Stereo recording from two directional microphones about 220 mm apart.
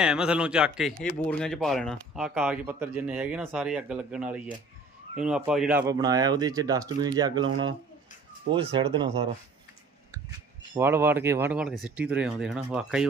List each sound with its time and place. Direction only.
0.0 s speech: 5° right (ahead or behind)
5.8 s speech: 15° right (ahead or behind)
10.8 s speech: 10° right (ahead or behind)